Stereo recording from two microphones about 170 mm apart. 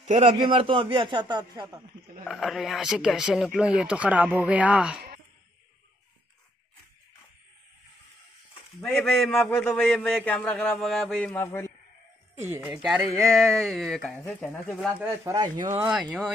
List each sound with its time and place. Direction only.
0.0 s a man's voice: 45° right (ahead or behind)
0.5 s speech: 30° right (ahead or behind)
2.2 s a man's voice: centre (ahead or behind)
8.8 s a man's voice: 5° left (ahead or behind)
12.6 s a man's voice: 5° right (ahead or behind)
15.3 s a man's voice: 15° right (ahead or behind)